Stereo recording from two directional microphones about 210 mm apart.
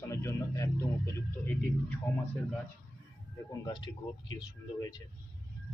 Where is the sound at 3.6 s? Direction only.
20° left (ahead or behind).